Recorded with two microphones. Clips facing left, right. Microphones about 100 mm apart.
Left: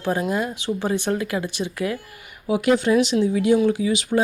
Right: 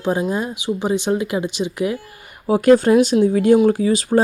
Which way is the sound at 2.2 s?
40° right (ahead or behind).